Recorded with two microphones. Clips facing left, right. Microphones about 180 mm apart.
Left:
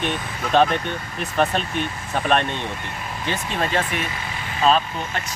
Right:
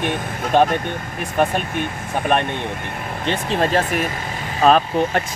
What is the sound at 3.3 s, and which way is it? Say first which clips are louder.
Speech: right 5 dB; 35° right (ahead or behind).